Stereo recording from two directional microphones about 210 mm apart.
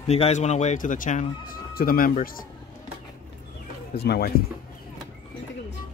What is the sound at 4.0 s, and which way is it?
Speech, 50° left (ahead or behind).